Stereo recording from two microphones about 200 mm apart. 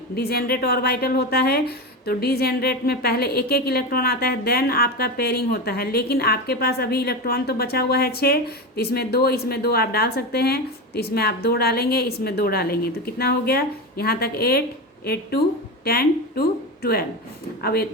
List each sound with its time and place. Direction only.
0.2 s a woman's voice: 50° left (ahead or behind)